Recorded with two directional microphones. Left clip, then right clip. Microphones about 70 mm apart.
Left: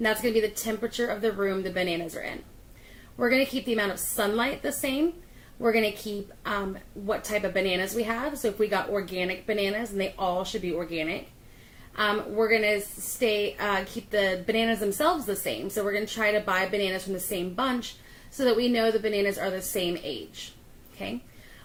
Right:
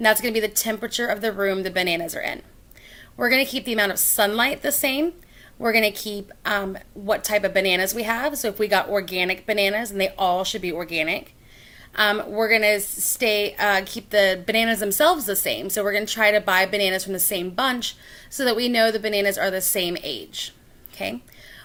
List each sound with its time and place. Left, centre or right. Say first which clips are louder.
0.0 s a woman's voice: right 5 dB; right